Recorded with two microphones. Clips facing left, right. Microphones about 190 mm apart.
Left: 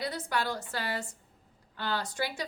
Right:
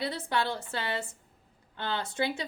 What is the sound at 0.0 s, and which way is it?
A woman's voice, 25° right (ahead or behind).